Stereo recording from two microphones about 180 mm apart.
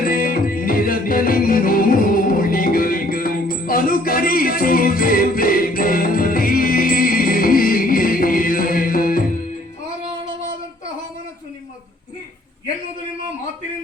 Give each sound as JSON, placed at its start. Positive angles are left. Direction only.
{"t": 0.0, "sound": "music", "side_deg": 50}